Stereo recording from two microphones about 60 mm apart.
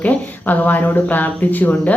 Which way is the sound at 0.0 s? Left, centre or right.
Left.